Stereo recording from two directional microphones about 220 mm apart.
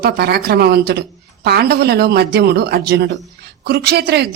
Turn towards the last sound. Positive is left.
turn(degrees=-50)  # may be behind; listen again after turning